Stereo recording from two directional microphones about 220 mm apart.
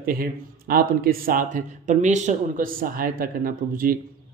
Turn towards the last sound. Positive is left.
turn(degrees=-40)  # may be behind; listen again after turning